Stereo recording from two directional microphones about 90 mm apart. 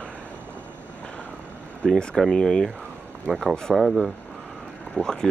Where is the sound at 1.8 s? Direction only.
10° left (ahead or behind).